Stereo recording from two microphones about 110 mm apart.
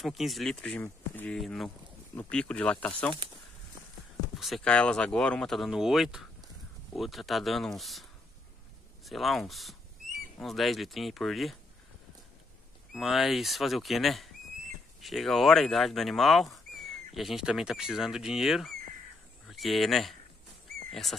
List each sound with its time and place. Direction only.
0.0 s speech: centre (ahead or behind)
0.7 s speech: 15° left (ahead or behind)
1.4 s speech: centre (ahead or behind)
2.1 s speech: 10° left (ahead or behind)
4.4 s speech: centre (ahead or behind)
4.6 s speech: 10° left (ahead or behind)
12.9 s speech: centre (ahead or behind)